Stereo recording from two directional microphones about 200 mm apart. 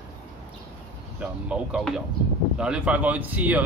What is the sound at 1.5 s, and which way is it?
A man's voice, 5° right (ahead or behind).